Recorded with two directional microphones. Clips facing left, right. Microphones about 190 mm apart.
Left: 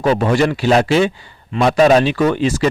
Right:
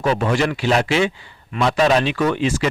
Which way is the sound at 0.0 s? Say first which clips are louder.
Left 4 dB; 35° left (ahead or behind).